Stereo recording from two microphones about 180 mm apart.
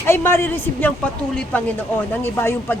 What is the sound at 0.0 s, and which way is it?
Speech, 15° left (ahead or behind).